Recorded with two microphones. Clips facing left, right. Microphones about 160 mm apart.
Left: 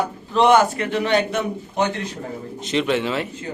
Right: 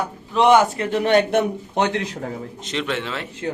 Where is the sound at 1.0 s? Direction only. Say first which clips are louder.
Right 5 dB; 55° right (ahead or behind); by 2.0 s 90° right.